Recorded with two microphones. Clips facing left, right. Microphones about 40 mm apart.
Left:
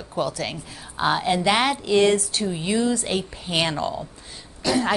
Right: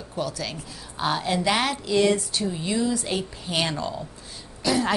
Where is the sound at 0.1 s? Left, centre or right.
Left.